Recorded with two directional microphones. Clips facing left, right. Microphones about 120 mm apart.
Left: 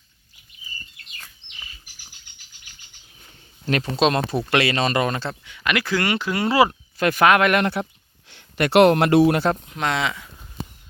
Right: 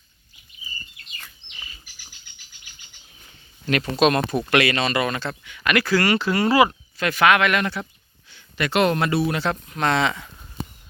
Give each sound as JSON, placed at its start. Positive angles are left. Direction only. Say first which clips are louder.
{"t": 3.7, "sound": "speech", "louder": "right 1 dB", "side_deg": 30}
{"t": 5.5, "sound": "speech", "louder": "right 3 dB", "side_deg": 20}
{"t": 6.9, "sound": "speech", "louder": "left 4 dB", "side_deg": 45}
{"t": 9.2, "sound": "speech", "louder": "left 6 dB", "side_deg": 45}
{"t": 9.7, "sound": "speech", "louder": "right 3 dB", "side_deg": 10}